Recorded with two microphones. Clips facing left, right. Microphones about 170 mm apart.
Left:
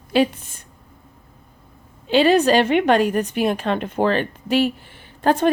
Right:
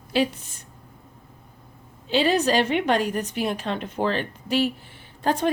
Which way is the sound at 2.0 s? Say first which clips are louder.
Left 6 dB; 65° left (ahead or behind).